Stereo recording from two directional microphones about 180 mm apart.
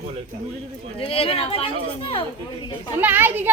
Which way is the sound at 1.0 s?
30° left (ahead or behind).